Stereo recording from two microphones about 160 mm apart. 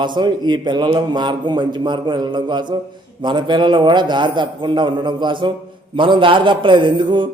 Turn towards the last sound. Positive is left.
turn(degrees=-30)  # may be behind; listen again after turning